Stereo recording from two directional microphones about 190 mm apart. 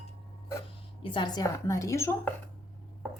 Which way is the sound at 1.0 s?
25° left (ahead or behind).